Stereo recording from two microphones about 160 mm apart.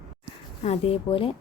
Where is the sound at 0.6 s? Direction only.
40° left (ahead or behind).